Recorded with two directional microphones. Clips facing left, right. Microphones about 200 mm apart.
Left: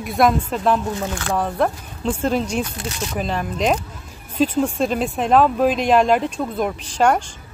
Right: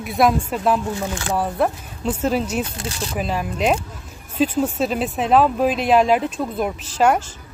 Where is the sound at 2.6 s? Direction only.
30° right (ahead or behind).